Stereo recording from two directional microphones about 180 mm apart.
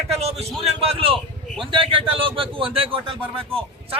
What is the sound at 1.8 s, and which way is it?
A man's voice, 30° right (ahead or behind).